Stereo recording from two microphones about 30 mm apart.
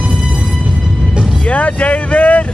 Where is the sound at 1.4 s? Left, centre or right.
Left.